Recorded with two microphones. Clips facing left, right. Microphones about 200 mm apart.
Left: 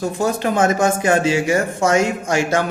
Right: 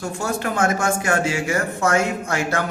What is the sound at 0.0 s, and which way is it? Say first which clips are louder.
Speech: left 5 dB; 20° left (ahead or behind).